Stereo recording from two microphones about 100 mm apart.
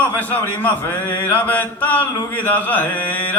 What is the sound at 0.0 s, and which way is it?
Mantra, 15° left (ahead or behind).